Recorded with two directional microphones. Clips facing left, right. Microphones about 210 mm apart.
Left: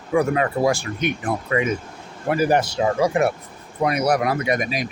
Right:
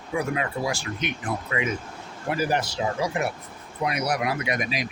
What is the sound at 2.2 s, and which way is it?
Speech, 60° left (ahead or behind).